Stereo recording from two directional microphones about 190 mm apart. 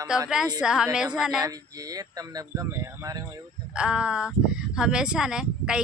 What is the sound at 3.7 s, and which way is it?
Speech, 5° right (ahead or behind).